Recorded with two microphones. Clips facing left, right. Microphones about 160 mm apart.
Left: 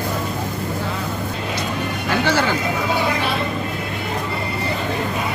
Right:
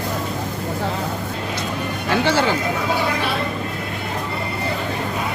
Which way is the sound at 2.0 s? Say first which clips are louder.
Right 1 dB; 25° right (ahead or behind).